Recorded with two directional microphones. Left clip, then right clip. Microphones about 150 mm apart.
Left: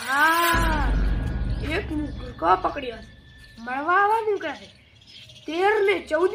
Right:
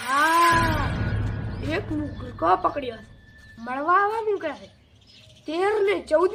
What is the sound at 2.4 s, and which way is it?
A woman's voice, 35° right (ahead or behind).